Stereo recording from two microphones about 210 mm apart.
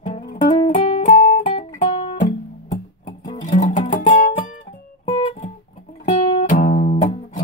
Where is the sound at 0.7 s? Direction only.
25° left (ahead or behind).